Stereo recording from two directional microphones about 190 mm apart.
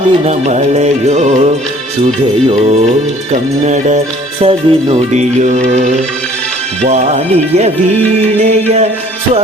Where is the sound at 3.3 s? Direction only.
40° right (ahead or behind).